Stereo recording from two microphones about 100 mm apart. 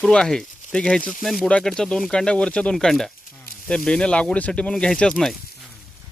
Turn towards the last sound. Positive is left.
turn(degrees=5)  # may be behind; listen again after turning